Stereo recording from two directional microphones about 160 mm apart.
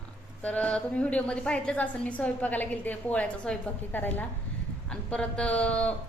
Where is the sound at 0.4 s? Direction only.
10° left (ahead or behind).